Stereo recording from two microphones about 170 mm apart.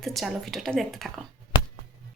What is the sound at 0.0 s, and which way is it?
Speech, centre (ahead or behind).